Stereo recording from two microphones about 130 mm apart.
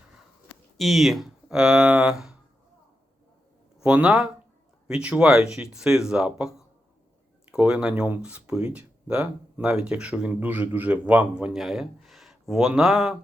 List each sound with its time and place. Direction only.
0.8 s speech: centre (ahead or behind)
3.8 s speech: 10° right (ahead or behind)